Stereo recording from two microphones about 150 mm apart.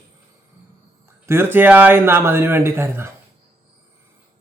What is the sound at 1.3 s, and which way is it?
A man's voice, 15° right (ahead or behind).